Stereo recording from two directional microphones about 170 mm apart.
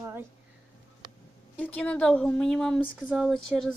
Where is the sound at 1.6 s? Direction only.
10° left (ahead or behind).